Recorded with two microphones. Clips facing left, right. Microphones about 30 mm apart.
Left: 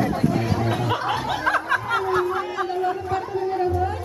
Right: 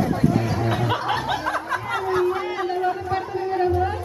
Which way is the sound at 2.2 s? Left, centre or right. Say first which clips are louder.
Right 1 dB; centre.